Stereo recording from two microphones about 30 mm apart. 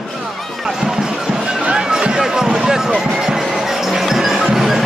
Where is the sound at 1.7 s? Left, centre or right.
Right.